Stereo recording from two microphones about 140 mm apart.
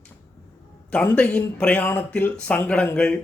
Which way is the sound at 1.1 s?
10° left (ahead or behind).